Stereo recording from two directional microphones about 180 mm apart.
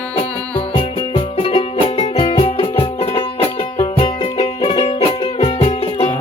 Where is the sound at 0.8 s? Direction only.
30° left (ahead or behind).